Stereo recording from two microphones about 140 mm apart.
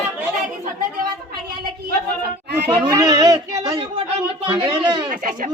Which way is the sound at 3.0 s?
25° right (ahead or behind).